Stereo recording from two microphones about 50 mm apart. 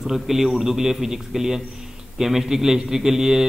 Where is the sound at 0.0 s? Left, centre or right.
Centre.